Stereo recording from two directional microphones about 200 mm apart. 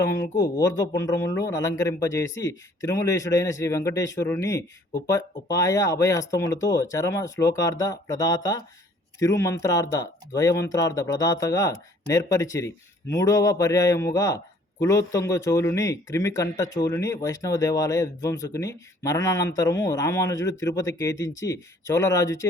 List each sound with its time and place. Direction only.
0.0 s speech: 15° left (ahead or behind)